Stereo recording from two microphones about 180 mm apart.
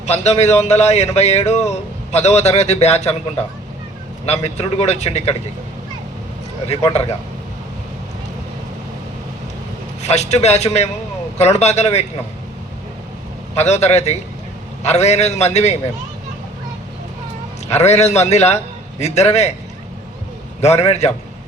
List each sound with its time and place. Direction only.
0.0 s speech: 35° left (ahead or behind)
4.3 s speech: 35° left (ahead or behind)
10.0 s speech: 40° left (ahead or behind)
13.6 s speech: 40° left (ahead or behind)
17.7 s speech: 40° left (ahead or behind)
20.6 s speech: 35° left (ahead or behind)